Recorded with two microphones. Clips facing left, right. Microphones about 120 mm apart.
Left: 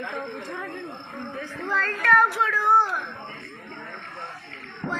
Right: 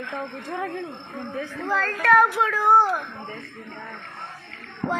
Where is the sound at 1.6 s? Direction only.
10° right (ahead or behind).